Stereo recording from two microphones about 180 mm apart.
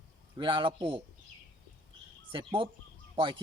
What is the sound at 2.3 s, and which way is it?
Speech, 25° right (ahead or behind).